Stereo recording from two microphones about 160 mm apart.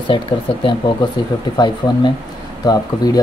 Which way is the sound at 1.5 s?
25° left (ahead or behind).